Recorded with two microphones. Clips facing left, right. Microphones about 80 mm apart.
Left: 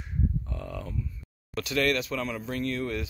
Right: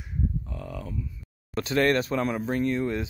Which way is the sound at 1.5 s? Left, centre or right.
Right.